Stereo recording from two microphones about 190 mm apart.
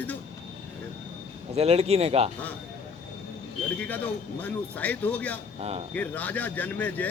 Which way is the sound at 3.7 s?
10° left (ahead or behind).